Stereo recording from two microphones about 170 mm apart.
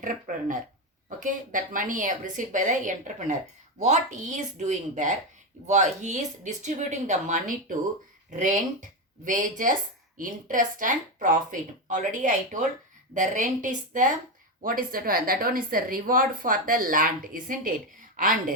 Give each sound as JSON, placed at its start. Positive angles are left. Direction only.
{"t": 0.0, "sound": "a woman's voice", "side_deg": -50}